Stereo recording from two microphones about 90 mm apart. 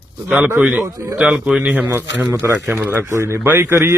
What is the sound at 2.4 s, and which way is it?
Speech, 25° right (ahead or behind).